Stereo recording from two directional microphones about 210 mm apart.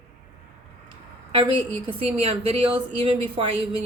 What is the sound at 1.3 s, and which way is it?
A woman's voice, 25° right (ahead or behind).